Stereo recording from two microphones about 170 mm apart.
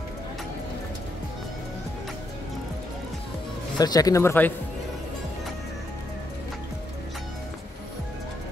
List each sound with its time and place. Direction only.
3.7 s speech: 25° left (ahead or behind)